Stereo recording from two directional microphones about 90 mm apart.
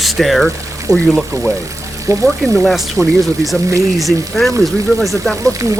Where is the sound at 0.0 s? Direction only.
Centre (ahead or behind).